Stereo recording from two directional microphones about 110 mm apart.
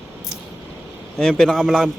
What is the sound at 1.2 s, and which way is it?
Speech, 5° left (ahead or behind).